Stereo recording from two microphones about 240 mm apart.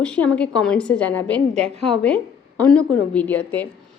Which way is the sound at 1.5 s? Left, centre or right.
Right.